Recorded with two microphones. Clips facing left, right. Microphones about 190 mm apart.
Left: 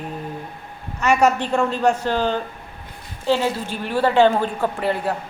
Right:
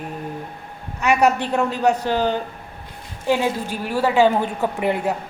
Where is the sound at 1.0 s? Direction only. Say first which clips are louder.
Even; 10° right (ahead or behind).